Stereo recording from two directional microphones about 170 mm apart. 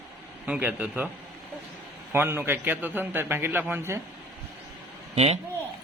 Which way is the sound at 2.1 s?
15° right (ahead or behind).